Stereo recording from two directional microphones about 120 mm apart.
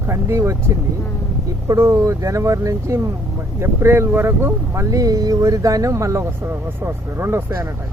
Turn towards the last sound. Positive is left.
turn(degrees=-20)  # may be behind; listen again after turning